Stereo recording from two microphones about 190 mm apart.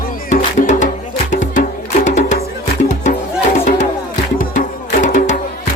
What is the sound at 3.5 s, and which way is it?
Music, 40° left (ahead or behind).